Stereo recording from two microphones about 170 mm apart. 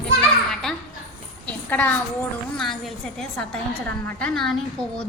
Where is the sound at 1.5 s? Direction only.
10° left (ahead or behind).